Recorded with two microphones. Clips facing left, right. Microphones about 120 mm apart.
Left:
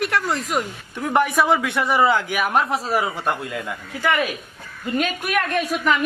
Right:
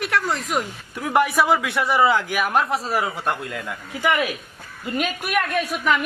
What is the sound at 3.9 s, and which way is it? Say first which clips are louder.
Speech: even; 15° right (ahead or behind).